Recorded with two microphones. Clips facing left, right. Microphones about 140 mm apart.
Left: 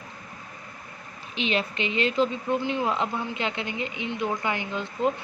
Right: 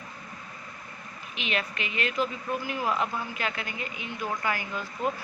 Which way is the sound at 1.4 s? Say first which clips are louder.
Left 5 dB; 30° left (ahead or behind).